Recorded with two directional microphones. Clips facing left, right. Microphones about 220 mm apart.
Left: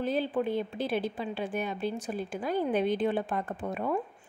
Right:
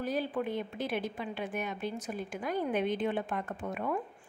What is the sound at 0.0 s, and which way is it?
A woman's voice, 25° left (ahead or behind).